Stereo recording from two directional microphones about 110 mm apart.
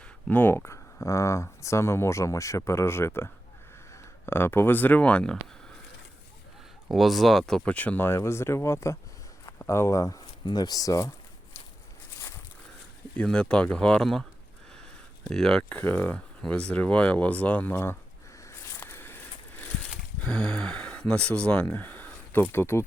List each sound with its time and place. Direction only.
0.3 s speech: 15° left (ahead or behind)
6.8 s speech: centre (ahead or behind); by 11.1 s 30° left (ahead or behind)
13.1 s speech: 10° left (ahead or behind)
15.3 s speech: 5° left (ahead or behind)
15.8 s speech: 15° left (ahead or behind)
18.4 s a sound: 25° left (ahead or behind)
20.2 s speech: 5° left (ahead or behind); by 22.8 s 20° left (ahead or behind)